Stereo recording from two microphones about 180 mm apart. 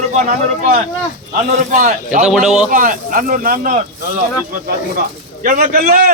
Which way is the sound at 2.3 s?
5° right (ahead or behind).